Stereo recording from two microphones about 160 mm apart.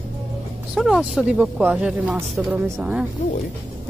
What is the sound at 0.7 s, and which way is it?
Speech, 5° right (ahead or behind).